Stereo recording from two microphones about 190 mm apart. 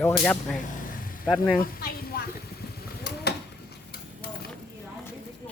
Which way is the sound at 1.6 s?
50° left (ahead or behind).